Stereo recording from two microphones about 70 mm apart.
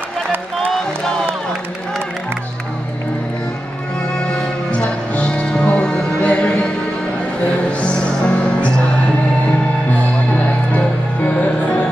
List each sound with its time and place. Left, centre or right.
0.6 s music: centre
4.2 s music: centre
7.8 s music: centre
9.8 s music: left